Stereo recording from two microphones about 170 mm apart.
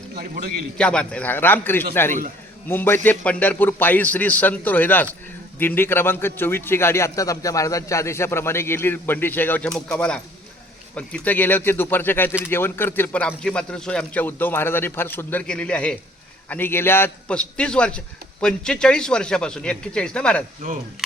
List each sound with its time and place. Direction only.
0.1 s a man's voice: 60° right (ahead or behind)
0.8 s a man's voice: 5° left (ahead or behind)